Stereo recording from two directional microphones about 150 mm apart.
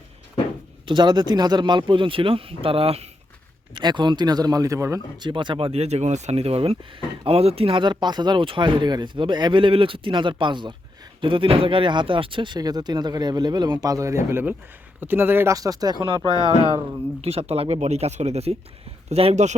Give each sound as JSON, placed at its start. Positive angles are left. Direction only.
{"t": 0.9, "sound": "speech", "side_deg": -30}
{"t": 3.8, "sound": "speech", "side_deg": -30}
{"t": 17.2, "sound": "speech", "side_deg": -40}